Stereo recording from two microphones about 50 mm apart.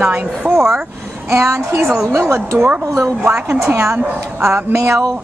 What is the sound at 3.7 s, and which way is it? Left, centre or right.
Speech, right.